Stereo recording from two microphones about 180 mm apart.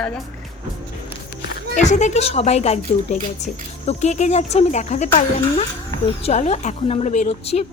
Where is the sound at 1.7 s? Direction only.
40° left (ahead or behind).